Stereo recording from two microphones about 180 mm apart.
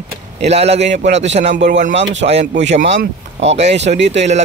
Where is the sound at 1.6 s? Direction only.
50° right (ahead or behind).